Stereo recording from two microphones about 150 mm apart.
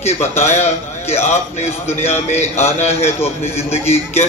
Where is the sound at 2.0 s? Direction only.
45° left (ahead or behind).